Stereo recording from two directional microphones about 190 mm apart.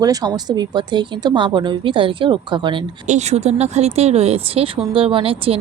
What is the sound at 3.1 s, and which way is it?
Speech, 35° right (ahead or behind).